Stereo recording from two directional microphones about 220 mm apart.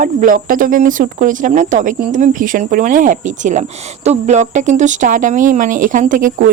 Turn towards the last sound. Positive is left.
turn(degrees=-40)  # may be behind; listen again after turning